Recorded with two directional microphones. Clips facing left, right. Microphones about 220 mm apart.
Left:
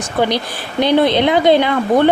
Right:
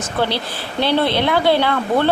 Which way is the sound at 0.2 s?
15° left (ahead or behind).